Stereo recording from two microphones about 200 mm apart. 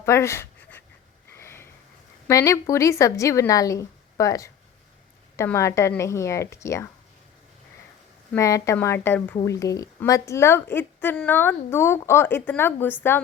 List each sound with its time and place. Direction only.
0.0 s dog: 15° left (ahead or behind)
1.4 s sniff: 10° left (ahead or behind)
2.2 s a woman's voice: 15° left (ahead or behind)
8.3 s a woman's voice: 15° left (ahead or behind)